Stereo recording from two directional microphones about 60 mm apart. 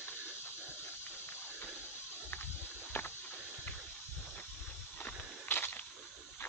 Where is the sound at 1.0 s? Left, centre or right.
Left.